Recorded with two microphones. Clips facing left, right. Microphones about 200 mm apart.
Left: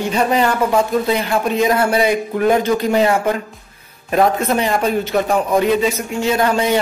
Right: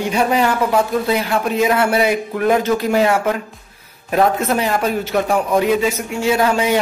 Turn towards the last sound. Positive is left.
turn(degrees=-5)  # may be behind; listen again after turning